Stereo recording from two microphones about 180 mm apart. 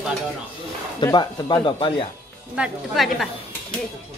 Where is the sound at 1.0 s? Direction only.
20° left (ahead or behind).